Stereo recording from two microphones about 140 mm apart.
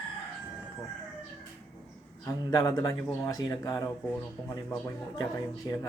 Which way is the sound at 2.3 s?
25° left (ahead or behind).